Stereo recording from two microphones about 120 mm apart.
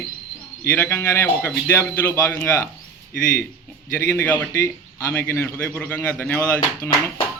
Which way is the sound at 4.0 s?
20° left (ahead or behind).